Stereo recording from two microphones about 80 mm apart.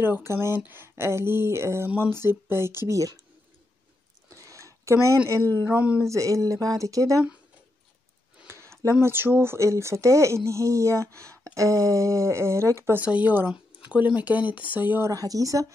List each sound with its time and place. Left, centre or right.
0.0 s speech: right
4.4 s a sound: right
5.7 s speech: centre
5.9 s speech: right
8.5 s a sound: right
9.0 s speech: right
12.9 s speech: centre
15.0 s speech: right